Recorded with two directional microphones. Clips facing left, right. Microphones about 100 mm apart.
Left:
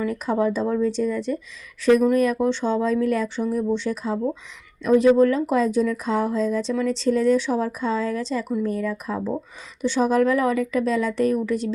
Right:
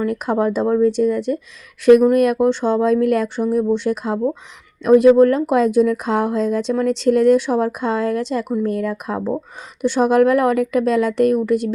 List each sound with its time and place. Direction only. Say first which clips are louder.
0.0 s speech: right 4 dB; 60° right (ahead or behind)
5.0 s speech: right 5 dB; 55° right (ahead or behind)